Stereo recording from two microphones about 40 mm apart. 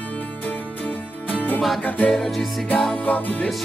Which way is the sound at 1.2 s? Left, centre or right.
Left.